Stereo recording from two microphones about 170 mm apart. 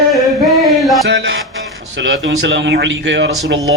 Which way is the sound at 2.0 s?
90° right.